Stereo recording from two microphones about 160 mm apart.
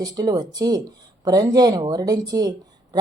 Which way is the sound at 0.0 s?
25° right (ahead or behind).